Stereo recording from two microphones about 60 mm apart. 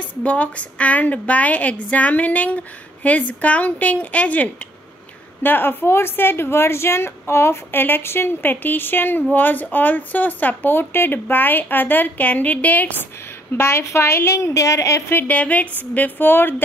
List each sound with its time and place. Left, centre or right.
0.0 s a woman's voice: left
5.4 s speech: left
13.6 s a woman's voice: left
15.2 s a woman's voice: left